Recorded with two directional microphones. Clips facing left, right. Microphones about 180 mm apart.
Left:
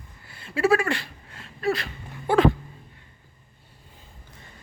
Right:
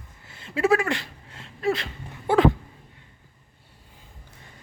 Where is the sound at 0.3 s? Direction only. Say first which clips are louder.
Even; 20° right (ahead or behind).